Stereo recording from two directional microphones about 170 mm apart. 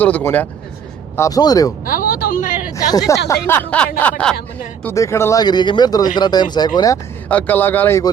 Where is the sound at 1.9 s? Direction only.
60° left (ahead or behind).